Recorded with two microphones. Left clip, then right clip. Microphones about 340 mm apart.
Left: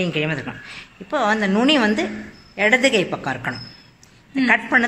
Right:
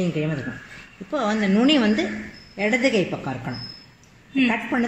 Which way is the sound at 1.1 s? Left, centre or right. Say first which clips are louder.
Left 4 dB; left.